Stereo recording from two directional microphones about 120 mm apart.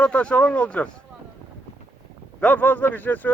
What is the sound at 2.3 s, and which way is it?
Speech, 15° left (ahead or behind).